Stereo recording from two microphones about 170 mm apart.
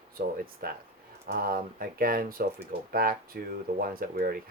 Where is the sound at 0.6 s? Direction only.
65° right (ahead or behind).